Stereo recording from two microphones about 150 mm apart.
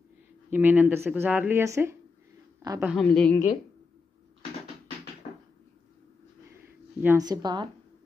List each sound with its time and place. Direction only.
0.5 s speech: 10° right (ahead or behind)
2.8 s a woman's voice: 5° right (ahead or behind)
3.1 s a woman's voice: 10° left (ahead or behind)
6.6 s a sound: 15° right (ahead or behind)
7.2 s speech: 30° right (ahead or behind)